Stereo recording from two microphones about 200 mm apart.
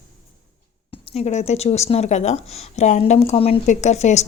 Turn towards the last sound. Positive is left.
turn(degrees=35)  # may be behind; listen again after turning